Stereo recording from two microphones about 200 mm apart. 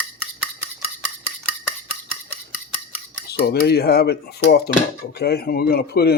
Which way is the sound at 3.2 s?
55° left (ahead or behind).